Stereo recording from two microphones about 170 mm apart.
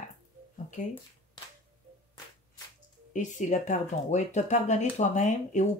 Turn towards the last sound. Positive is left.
turn(degrees=45)  # may be behind; listen again after turning